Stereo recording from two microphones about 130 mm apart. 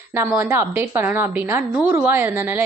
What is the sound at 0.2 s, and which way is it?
A woman's voice, 20° right (ahead or behind).